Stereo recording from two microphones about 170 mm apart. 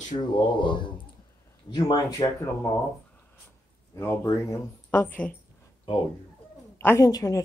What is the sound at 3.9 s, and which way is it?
Speech, 15° left (ahead or behind).